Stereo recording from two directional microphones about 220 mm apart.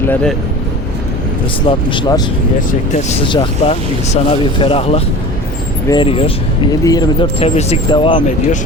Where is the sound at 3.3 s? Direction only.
25° left (ahead or behind).